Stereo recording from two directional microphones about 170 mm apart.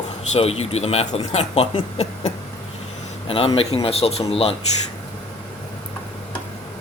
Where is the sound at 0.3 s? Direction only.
35° left (ahead or behind).